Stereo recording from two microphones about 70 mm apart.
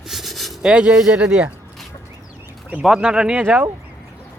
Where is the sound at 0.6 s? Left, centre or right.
Centre.